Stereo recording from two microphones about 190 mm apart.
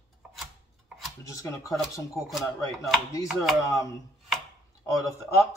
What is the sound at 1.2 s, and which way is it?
Speech, 15° left (ahead or behind).